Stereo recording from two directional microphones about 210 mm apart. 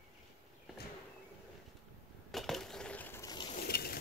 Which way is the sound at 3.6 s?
45° left (ahead or behind).